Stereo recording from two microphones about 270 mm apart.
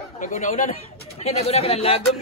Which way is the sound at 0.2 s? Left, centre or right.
Left.